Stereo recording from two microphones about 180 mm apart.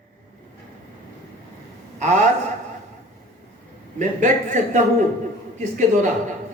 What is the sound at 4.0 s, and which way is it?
A man's voice, 45° right (ahead or behind).